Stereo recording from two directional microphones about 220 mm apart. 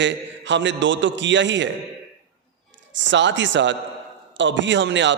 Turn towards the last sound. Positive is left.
turn(degrees=-55)  # may be behind; listen again after turning